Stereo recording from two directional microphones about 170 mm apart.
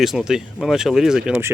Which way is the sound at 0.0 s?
Centre (ahead or behind).